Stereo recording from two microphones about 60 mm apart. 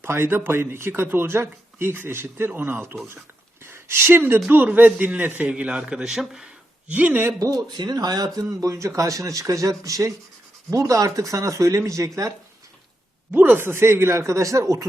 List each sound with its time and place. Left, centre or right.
0.0 s speech: right
3.6 s speech: right; by 6.5 s centre
6.8 s speech: right
7.3 s speech: right
13.3 s speech: right